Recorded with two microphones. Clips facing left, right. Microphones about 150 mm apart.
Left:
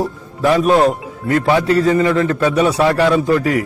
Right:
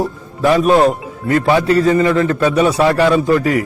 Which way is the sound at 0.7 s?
15° right (ahead or behind).